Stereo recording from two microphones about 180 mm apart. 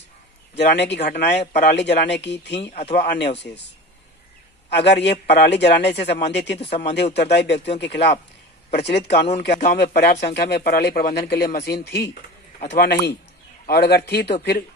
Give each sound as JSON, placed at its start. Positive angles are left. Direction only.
{"t": 0.6, "sound": "speech", "side_deg": 75}
{"t": 4.6, "sound": "a man's voice", "side_deg": 70}